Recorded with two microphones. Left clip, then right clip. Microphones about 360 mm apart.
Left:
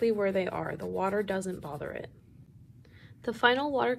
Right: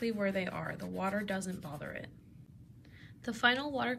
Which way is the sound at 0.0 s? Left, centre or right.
Centre.